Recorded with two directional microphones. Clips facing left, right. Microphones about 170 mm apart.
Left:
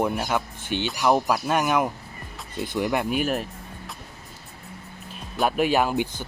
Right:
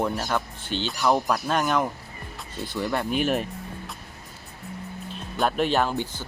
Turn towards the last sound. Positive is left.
turn(degrees=15)  # may be behind; listen again after turning